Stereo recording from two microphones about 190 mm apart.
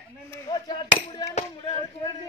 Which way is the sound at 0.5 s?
25° left (ahead or behind).